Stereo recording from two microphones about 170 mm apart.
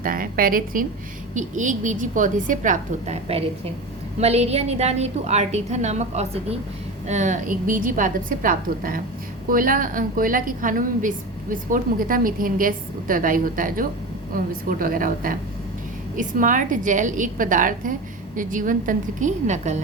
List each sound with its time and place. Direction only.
0.0 s a woman's voice: 55° right (ahead or behind)